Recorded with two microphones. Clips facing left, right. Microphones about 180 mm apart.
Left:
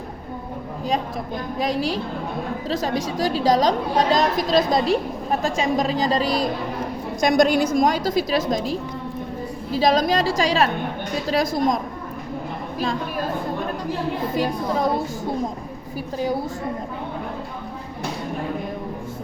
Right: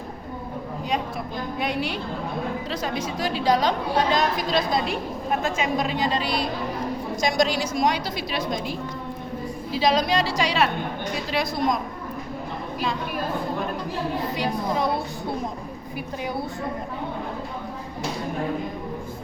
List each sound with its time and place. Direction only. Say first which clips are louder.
1.5 s a woman's voice: left 5 dB; 35° left (ahead or behind)
7.2 s a woman's voice: left 6 dB; 55° left (ahead or behind)